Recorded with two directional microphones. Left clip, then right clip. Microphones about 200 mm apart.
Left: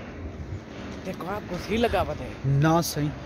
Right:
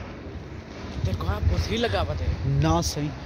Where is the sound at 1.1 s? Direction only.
45° left (ahead or behind).